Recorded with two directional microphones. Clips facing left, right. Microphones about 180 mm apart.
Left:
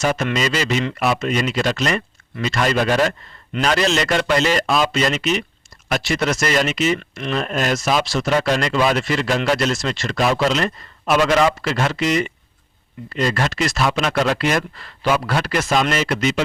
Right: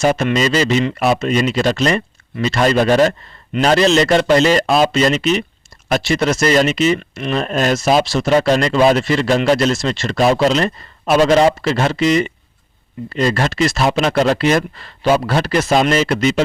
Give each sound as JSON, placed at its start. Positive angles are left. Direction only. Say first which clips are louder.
{"t": 0.0, "sound": "speech", "louder": "right 5 dB", "side_deg": -30}
{"t": 7.4, "sound": "speech", "louder": "right 6 dB", "side_deg": -35}